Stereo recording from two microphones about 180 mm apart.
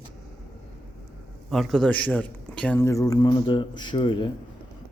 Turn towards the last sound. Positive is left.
turn(degrees=25)  # may be behind; listen again after turning